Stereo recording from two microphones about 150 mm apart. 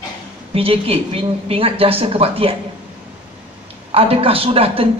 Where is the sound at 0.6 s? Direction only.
40° right (ahead or behind).